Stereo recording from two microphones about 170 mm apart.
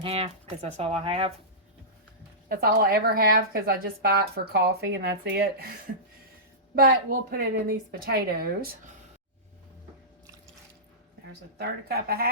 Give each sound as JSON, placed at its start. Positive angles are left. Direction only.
{"t": 0.0, "sound": "speech", "side_deg": -35}
{"t": 2.5, "sound": "a woman's voice", "side_deg": -65}
{"t": 6.7, "sound": "a woman's voice", "side_deg": -65}
{"t": 11.5, "sound": "speech", "side_deg": -70}